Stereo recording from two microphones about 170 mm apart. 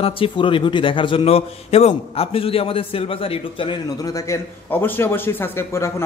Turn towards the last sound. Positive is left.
turn(degrees=15)  # may be behind; listen again after turning